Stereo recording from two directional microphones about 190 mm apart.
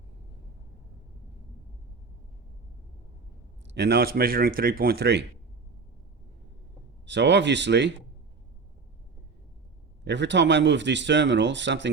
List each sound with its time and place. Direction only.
3.8 s speech: 55° right (ahead or behind)
7.0 s speech: 70° right (ahead or behind)
10.0 s speech: 65° right (ahead or behind)